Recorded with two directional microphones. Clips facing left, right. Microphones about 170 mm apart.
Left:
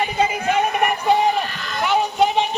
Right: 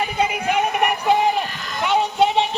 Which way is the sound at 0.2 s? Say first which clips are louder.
Left 1 dB; 10° right (ahead or behind).